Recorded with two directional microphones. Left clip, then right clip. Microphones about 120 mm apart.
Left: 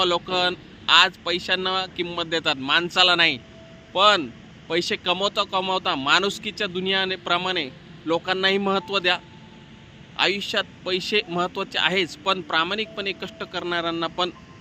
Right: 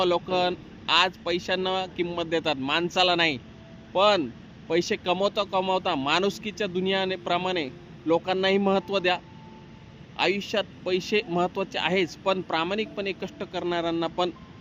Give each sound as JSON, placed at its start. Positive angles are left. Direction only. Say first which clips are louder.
{"t": 0.0, "sound": "speech", "louder": "left 2 dB", "side_deg": -20}